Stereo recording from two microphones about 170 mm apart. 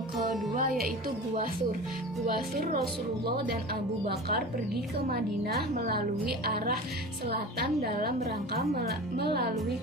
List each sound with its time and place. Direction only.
0.5 s music: 60° right (ahead or behind)
2.2 s speech: 60° right (ahead or behind)
5.0 s speech: 65° right (ahead or behind)